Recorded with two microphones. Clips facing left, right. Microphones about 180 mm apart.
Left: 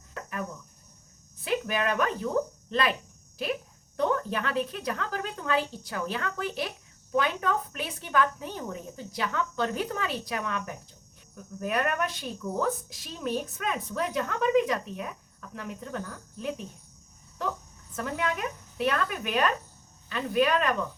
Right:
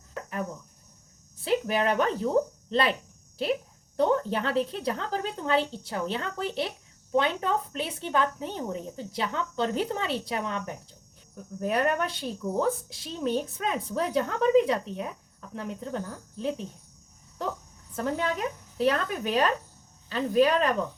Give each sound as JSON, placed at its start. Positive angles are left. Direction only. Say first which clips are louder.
{"t": 1.4, "sound": "speech", "louder": "right 3 dB", "side_deg": -30}
{"t": 17.9, "sound": "a woman's voice", "louder": "right 2 dB", "side_deg": -30}